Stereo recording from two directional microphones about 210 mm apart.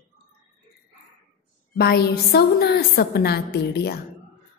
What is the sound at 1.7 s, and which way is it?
A woman's voice, 50° left (ahead or behind).